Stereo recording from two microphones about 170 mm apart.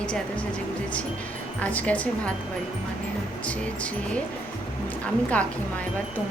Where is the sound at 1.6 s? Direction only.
10° left (ahead or behind).